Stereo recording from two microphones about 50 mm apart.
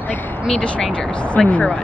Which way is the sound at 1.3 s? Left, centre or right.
Left.